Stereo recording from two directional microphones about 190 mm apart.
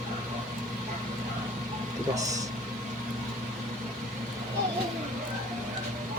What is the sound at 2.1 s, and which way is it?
Speech, 20° right (ahead or behind).